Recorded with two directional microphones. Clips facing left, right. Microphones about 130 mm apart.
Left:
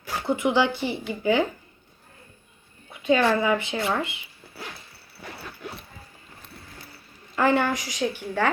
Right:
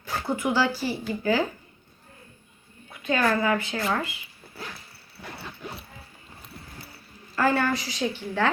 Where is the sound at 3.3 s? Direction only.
20° left (ahead or behind).